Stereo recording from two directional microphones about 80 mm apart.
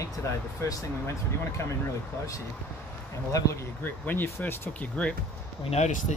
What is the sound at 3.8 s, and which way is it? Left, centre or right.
Speech, left.